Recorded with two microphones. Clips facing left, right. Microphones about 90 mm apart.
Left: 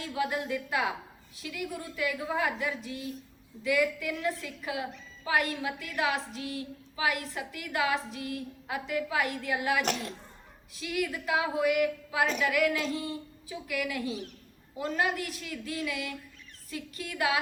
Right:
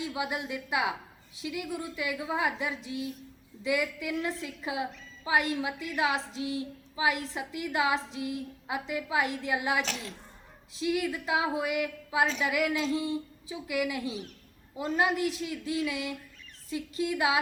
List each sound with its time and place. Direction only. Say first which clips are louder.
0.0 s a woman's voice: left 1 dB; 15° right (ahead or behind)